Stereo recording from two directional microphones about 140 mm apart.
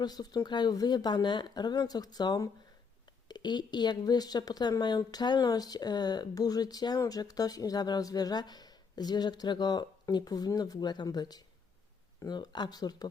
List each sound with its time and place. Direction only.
0.0 s speech: 30° left (ahead or behind)